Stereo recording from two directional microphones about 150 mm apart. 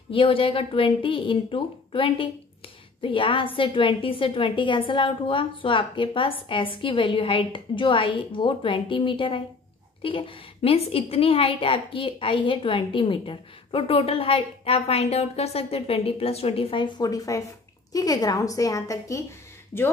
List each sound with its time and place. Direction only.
0.1 s a woman's voice: 35° left (ahead or behind); by 19.2 s 20° left (ahead or behind)